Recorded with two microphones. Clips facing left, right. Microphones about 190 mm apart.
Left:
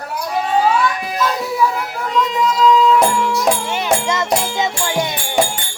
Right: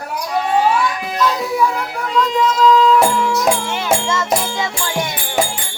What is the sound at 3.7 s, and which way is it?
Speech, 15° left (ahead or behind).